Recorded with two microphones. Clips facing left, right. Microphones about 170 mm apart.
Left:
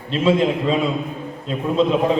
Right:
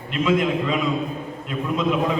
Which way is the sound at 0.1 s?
30° left (ahead or behind).